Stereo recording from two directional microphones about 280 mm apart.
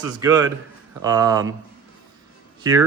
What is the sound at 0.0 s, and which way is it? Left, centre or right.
Speech, centre.